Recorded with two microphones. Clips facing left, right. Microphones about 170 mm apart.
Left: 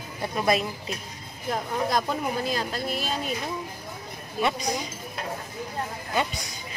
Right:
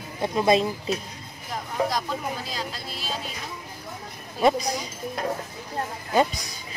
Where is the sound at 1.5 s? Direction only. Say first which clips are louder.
Left 1 dB; 55° left (ahead or behind).